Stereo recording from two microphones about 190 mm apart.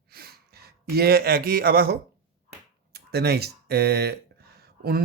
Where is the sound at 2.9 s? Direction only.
55° right (ahead or behind).